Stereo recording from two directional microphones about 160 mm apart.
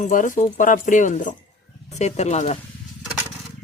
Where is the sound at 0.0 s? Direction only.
55° left (ahead or behind).